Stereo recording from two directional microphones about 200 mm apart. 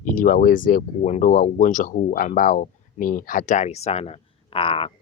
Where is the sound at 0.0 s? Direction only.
40° left (ahead or behind).